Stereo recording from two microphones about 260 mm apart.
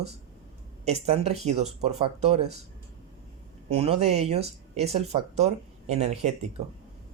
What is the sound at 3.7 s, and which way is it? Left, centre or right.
Speech, right.